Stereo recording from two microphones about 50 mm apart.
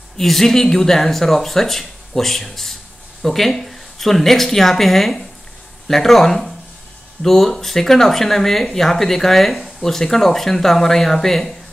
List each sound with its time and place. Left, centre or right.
0.2 s speech: centre